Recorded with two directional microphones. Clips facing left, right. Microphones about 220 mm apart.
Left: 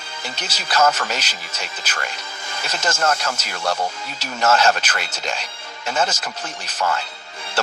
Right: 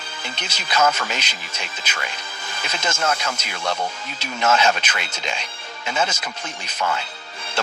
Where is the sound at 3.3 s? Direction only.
10° left (ahead or behind).